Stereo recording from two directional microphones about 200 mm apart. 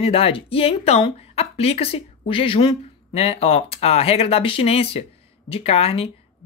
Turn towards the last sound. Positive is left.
turn(degrees=30)  # may be behind; listen again after turning